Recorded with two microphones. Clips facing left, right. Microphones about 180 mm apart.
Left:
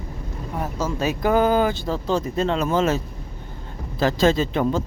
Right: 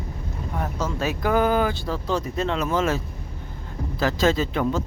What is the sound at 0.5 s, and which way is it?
Speech, 10° left (ahead or behind).